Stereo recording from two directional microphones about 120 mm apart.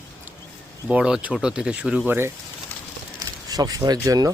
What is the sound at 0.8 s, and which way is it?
Speech, 5° right (ahead or behind).